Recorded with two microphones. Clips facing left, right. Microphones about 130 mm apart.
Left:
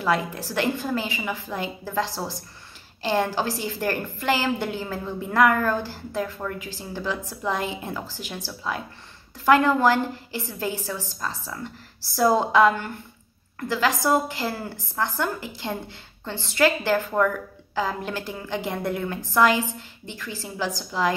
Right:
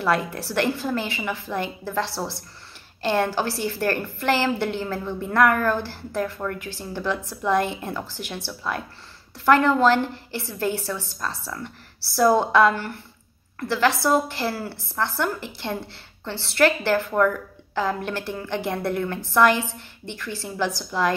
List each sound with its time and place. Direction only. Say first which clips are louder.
0.0 s a woman's voice: right 1 dB; 15° left (ahead or behind)